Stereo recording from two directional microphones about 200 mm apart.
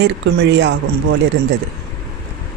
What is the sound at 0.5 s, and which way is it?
Speech, 60° right (ahead or behind).